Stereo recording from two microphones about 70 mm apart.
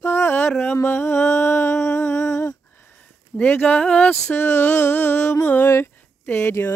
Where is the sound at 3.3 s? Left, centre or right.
Left.